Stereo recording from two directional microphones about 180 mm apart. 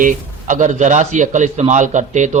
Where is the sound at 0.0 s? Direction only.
45° right (ahead or behind).